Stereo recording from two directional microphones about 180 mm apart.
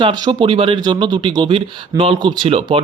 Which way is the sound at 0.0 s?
25° right (ahead or behind).